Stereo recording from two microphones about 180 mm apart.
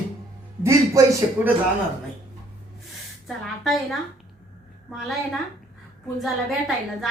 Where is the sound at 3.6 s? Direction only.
Centre (ahead or behind).